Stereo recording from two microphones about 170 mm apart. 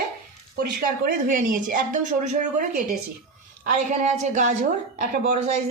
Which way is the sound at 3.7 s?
45° right (ahead or behind).